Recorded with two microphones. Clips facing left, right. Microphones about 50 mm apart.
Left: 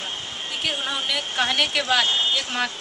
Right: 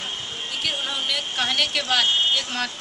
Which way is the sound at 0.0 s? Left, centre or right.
Centre.